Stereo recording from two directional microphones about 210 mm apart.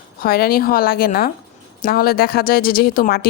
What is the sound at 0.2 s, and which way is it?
A woman's voice, 45° left (ahead or behind).